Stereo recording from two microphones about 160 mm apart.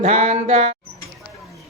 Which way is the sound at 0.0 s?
45° right (ahead or behind).